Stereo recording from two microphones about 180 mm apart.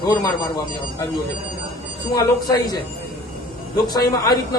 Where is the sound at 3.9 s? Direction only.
20° left (ahead or behind).